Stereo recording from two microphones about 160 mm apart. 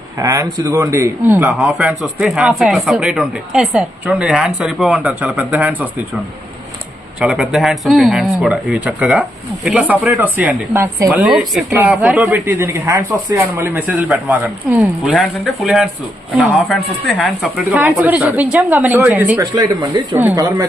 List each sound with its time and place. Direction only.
0.2 s speech: 20° right (ahead or behind)
7.2 s speech: centre (ahead or behind)
19.5 s speech: 25° right (ahead or behind)